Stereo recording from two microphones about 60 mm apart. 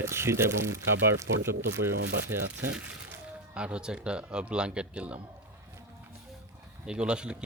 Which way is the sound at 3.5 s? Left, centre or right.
Centre.